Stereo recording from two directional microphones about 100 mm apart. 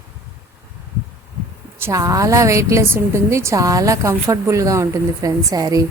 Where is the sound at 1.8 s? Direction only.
35° right (ahead or behind).